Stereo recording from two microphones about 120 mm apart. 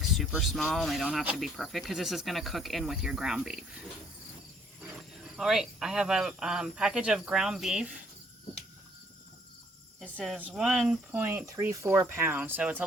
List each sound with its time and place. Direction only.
0.2 s speech: centre (ahead or behind)
5.4 s speech: 5° right (ahead or behind)
10.5 s speech: 5° right (ahead or behind)